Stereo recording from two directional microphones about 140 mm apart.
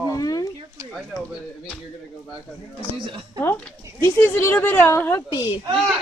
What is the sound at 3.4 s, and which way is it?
Speech, 15° left (ahead or behind).